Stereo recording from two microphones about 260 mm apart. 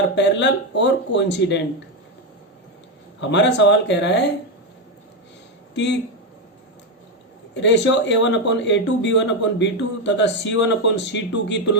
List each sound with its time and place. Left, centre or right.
0.2 s speech: left
3.2 s speech: left
5.7 s speech: left
7.5 s speech: left